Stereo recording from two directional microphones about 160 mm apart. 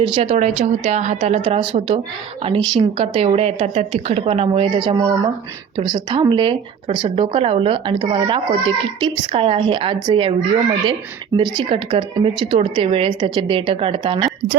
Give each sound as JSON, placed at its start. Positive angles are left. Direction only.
{"t": 0.0, "sound": "a woman's voice", "side_deg": -35}
{"t": 11.3, "sound": "speech", "side_deg": -30}